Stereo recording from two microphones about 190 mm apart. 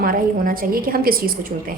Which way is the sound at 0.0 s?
50° right (ahead or behind).